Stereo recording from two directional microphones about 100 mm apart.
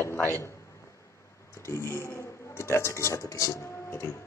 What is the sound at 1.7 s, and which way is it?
A man's voice, 25° left (ahead or behind).